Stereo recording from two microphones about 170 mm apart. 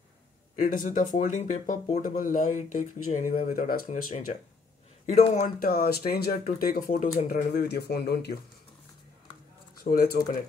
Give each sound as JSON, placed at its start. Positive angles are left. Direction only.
{"t": 0.6, "sound": "speech", "side_deg": 50}
{"t": 5.6, "sound": "speech", "side_deg": 60}
{"t": 7.2, "sound": "speech", "side_deg": 70}
{"t": 9.8, "sound": "speech", "side_deg": 60}